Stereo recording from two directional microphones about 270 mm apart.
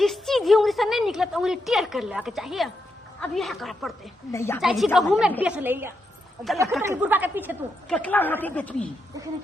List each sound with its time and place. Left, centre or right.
0.0 s a woman's voice: centre
4.6 s a woman's voice: centre
7.9 s a woman's voice: centre